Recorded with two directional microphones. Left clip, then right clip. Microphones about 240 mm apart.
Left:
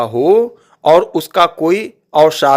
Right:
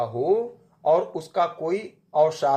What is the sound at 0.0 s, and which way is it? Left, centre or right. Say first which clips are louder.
A man's voice: left 12 dB; left.